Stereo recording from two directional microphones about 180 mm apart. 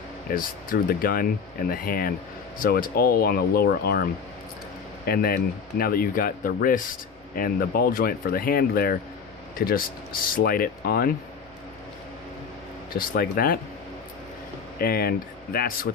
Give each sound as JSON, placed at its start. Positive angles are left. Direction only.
{"t": 0.3, "sound": "speech", "side_deg": 50}
{"t": 12.9, "sound": "speech", "side_deg": 55}
{"t": 14.8, "sound": "speech", "side_deg": 55}